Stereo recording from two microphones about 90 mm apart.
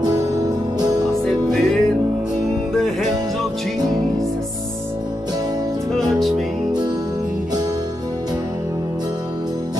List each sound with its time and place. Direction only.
0.0 s music: 45° right (ahead or behind)
1.2 s music: 5° left (ahead or behind)
5.9 s music: centre (ahead or behind)